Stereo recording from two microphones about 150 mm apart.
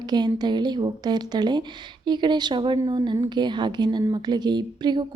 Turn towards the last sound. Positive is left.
turn(degrees=-30)  # may be behind; listen again after turning